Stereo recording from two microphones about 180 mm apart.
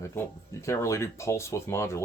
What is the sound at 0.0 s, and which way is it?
Speech, 15° left (ahead or behind).